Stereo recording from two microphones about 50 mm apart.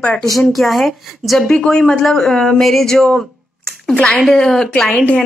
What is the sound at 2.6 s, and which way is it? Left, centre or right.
A woman's voice, centre.